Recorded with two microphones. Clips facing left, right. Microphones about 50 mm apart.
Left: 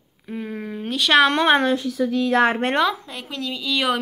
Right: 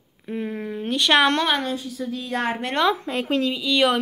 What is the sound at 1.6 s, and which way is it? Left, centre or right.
Speech, left.